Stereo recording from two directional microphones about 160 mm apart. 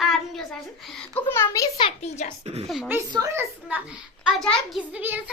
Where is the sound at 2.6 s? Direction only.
Centre (ahead or behind).